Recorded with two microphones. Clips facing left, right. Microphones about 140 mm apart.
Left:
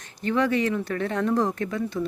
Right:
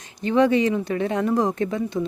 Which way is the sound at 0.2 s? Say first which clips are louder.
Right 5 dB; 20° right (ahead or behind).